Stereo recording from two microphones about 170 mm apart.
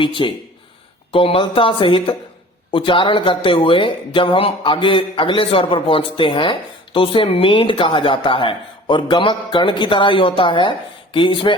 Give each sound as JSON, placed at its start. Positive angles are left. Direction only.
{"t": 0.0, "sound": "speech", "side_deg": 30}